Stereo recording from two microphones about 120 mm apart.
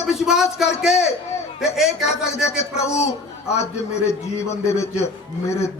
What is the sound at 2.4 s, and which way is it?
Speech, 5° right (ahead or behind).